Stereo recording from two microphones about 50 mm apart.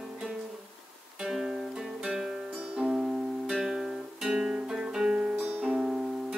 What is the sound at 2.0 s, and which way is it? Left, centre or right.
Music, centre.